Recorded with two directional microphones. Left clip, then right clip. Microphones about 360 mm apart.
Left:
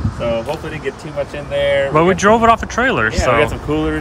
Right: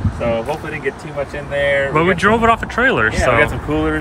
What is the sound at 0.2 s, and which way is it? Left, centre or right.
Speech, centre.